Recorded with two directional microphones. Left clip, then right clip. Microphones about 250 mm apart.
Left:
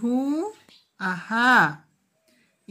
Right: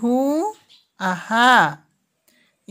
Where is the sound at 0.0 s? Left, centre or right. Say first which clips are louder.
Right 6 dB; right.